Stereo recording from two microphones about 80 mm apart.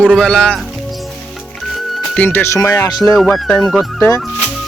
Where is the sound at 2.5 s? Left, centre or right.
Left.